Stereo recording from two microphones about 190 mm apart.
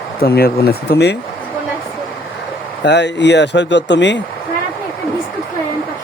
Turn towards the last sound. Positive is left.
turn(degrees=65)  # may be behind; listen again after turning